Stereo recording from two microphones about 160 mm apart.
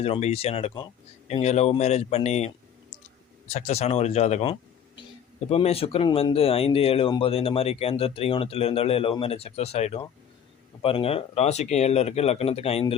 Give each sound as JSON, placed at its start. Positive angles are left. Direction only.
{"t": 0.0, "sound": "speech", "side_deg": 40}
{"t": 3.5, "sound": "speech", "side_deg": 40}